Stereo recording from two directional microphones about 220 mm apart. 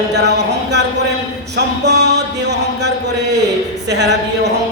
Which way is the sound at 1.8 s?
50° right (ahead or behind).